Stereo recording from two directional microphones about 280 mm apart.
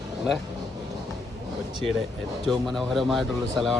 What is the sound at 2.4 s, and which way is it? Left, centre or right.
Speech, centre.